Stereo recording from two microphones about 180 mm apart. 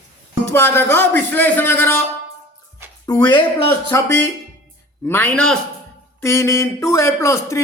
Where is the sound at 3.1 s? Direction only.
20° left (ahead or behind).